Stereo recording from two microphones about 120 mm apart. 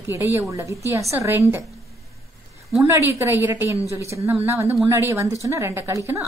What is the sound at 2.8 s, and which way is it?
A woman's voice, 20° right (ahead or behind).